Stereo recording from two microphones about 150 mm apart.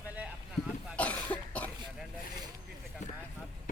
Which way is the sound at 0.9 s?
10° left (ahead or behind).